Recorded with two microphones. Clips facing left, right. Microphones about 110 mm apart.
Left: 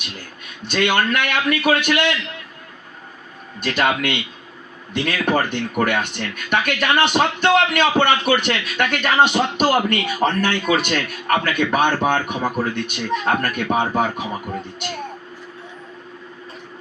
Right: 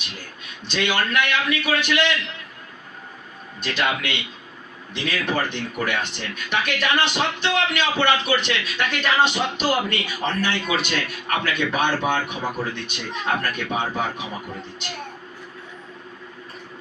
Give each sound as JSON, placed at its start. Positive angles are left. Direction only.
{"t": 0.7, "sound": "speech", "side_deg": 55}
{"t": 3.6, "sound": "speech", "side_deg": 50}